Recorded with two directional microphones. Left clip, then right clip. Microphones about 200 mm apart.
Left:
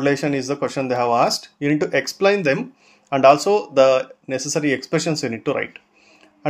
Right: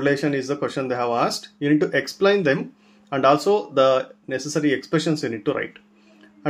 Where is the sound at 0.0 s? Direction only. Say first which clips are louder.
Left 1 dB; 35° left (ahead or behind).